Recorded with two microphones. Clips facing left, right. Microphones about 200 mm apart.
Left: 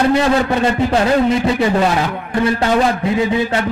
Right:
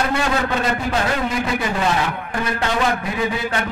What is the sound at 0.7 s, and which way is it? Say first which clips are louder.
A man's voice: left 7 dB; 30° left (ahead or behind).